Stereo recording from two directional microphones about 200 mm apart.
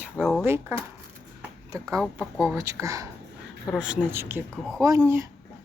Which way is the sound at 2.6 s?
15° right (ahead or behind).